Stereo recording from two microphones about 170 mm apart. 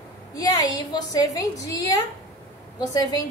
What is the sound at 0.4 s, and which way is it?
A woman's voice, 20° left (ahead or behind).